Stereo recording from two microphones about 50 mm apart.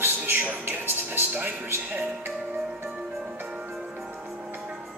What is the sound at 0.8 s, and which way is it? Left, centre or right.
Music, right.